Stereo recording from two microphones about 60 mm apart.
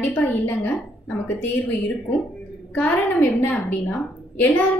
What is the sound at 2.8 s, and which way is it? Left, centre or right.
A woman's voice, left.